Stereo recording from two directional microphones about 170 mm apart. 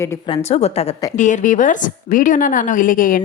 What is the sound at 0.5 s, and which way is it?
A woman's voice, 40° left (ahead or behind).